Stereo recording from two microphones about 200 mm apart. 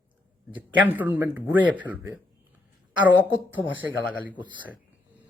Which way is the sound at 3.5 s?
70° left (ahead or behind).